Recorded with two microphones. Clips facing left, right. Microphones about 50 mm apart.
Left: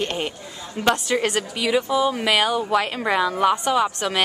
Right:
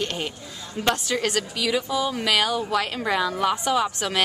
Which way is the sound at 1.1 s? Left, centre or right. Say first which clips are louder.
Left 3 dB; centre.